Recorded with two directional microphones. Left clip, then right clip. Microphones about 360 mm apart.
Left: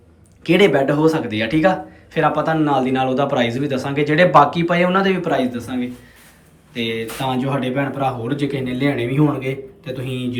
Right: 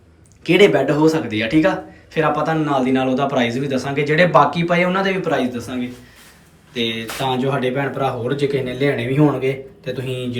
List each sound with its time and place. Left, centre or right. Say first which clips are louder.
0.4 s speech: right 1 dB; centre